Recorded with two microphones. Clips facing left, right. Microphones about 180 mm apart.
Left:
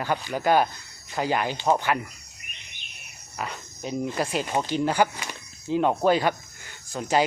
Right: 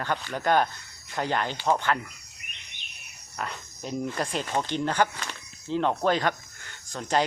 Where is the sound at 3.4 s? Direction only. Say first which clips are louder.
Left 2 dB; 5° left (ahead or behind).